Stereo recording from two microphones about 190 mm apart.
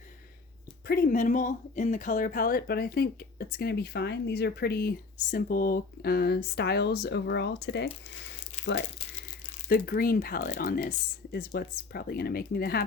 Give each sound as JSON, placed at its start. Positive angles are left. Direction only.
{"t": 0.9, "sound": "speech", "side_deg": 55}
{"t": 8.2, "sound": "a sound", "side_deg": 70}
{"t": 9.6, "sound": "speech", "side_deg": 50}